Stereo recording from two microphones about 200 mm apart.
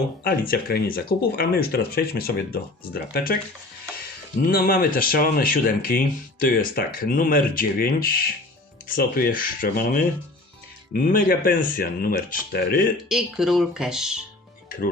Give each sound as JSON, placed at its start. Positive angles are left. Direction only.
{"t": 0.3, "sound": "speech", "side_deg": 45}
{"t": 4.4, "sound": "speech", "side_deg": 45}
{"t": 13.1, "sound": "speech", "side_deg": 0}